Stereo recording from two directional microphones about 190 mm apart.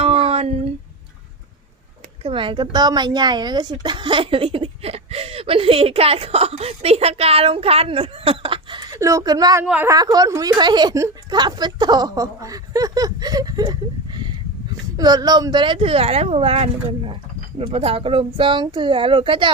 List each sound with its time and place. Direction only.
0.0 s a sound: 30° right (ahead or behind)
2.2 s speech: 25° right (ahead or behind)
9.6 s speech: 10° right (ahead or behind)
9.9 s speech: 20° right (ahead or behind)